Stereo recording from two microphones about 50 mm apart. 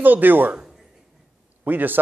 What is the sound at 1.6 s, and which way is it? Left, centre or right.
Speech, right.